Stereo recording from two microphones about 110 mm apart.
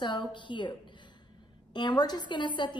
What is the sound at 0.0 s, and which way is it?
A woman's voice, 45° left (ahead or behind).